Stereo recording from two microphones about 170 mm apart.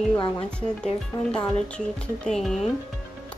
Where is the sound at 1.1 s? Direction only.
25° left (ahead or behind).